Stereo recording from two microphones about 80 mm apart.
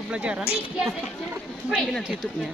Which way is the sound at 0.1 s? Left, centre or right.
Centre.